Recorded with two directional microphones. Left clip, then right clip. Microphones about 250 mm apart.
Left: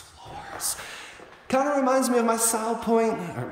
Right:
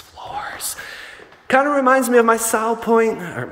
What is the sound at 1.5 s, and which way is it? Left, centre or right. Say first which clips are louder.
A man's voice: right 8 dB; centre.